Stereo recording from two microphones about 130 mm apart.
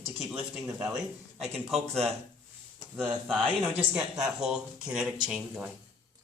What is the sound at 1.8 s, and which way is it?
Speech, 55° right (ahead or behind).